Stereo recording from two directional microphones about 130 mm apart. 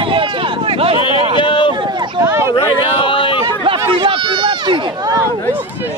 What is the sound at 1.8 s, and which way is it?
Run, 35° right (ahead or behind).